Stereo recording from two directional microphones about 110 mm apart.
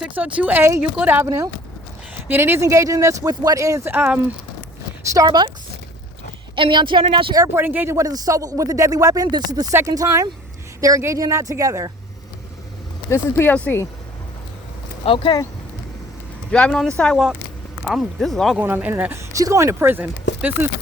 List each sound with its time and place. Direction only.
0.0 s speech: 10° right (ahead or behind); by 3.9 s 30° right (ahead or behind)
3.9 s speech: 15° right (ahead or behind)
5.0 s speech: 35° right (ahead or behind)
6.6 s speech: 45° right (ahead or behind)
7.3 s speech: 25° right (ahead or behind)
13.1 s speech: 20° left (ahead or behind)
15.0 s speech: 50° left (ahead or behind)
16.5 s speech: 10° left (ahead or behind)
18.5 s speech: 15° right (ahead or behind)
19.4 s speech: 30° right (ahead or behind)